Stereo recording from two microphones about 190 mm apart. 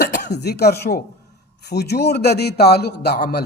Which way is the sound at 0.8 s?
50° left (ahead or behind).